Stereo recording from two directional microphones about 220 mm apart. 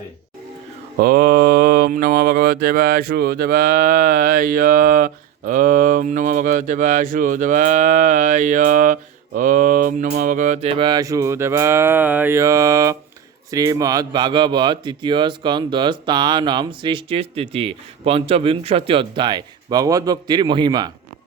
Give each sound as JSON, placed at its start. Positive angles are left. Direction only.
{"t": 0.9, "sound": "mantra", "side_deg": -40}
{"t": 13.5, "sound": "speech", "side_deg": -15}